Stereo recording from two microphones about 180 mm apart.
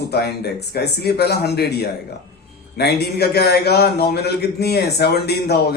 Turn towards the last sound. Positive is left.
turn(degrees=65)  # may be behind; listen again after turning